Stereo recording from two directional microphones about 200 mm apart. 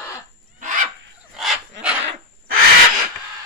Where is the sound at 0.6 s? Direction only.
40° right (ahead or behind).